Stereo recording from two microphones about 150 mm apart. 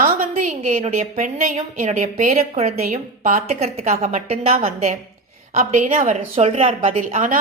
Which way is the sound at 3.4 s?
45° right (ahead or behind).